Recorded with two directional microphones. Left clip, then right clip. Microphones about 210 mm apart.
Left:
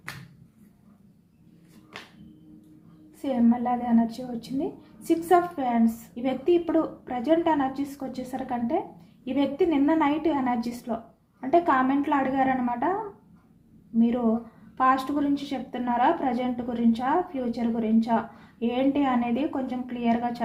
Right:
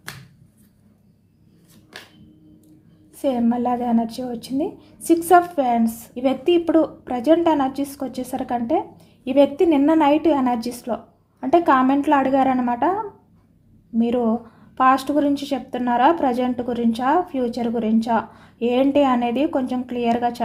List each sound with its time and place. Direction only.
3.2 s a woman's voice: 55° right (ahead or behind)
14.8 s a woman's voice: 55° right (ahead or behind)